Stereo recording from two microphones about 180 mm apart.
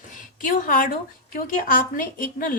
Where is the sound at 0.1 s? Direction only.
45° left (ahead or behind).